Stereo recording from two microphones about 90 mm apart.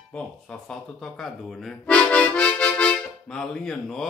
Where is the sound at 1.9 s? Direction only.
15° left (ahead or behind).